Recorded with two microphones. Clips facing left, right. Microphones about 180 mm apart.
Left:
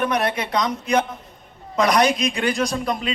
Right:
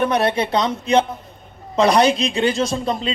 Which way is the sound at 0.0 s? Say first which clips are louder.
Right 4 dB; 30° right (ahead or behind).